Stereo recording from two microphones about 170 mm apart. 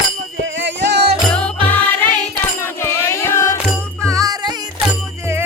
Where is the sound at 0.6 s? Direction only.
85° right.